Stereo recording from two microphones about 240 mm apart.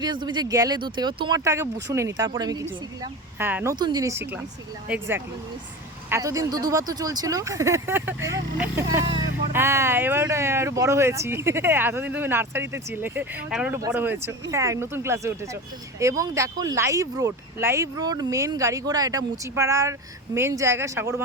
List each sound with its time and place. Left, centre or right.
0.0 s speech: centre